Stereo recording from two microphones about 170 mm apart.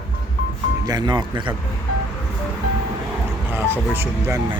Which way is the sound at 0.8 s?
25° right (ahead or behind).